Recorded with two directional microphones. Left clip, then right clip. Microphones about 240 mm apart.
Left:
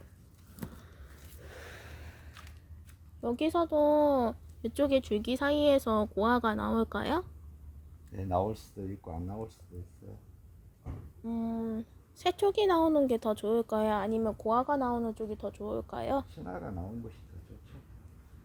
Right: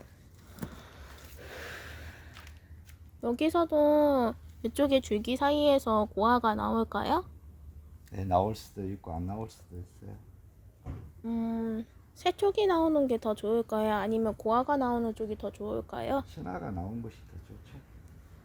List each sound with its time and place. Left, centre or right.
0.5 s a sound: centre
3.2 s speech: centre
8.1 s speech: right
11.2 s a woman's voice: centre
16.3 s speech: right